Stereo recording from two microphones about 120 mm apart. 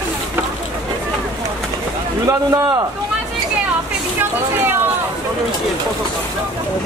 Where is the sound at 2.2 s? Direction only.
25° right (ahead or behind).